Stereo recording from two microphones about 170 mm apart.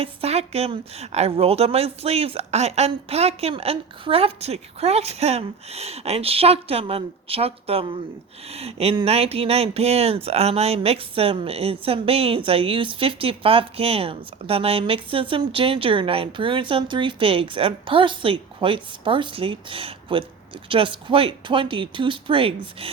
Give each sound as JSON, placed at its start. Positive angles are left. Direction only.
{"t": 0.0, "sound": "a woman's voice", "side_deg": -35}